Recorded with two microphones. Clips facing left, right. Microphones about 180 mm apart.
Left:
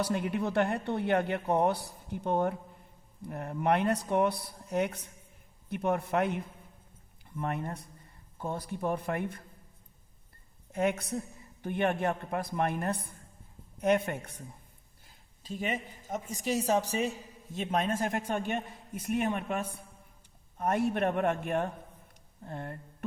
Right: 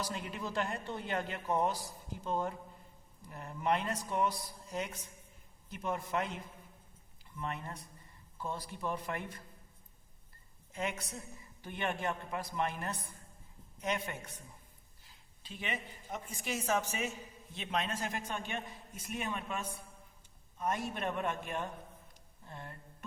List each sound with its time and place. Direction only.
0.0 s a woman's voice: 60° left (ahead or behind)
10.7 s speech: 60° left (ahead or behind)
15.0 s a woman's voice: 45° left (ahead or behind)